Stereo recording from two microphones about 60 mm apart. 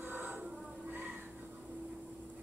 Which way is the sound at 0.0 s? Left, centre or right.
Right.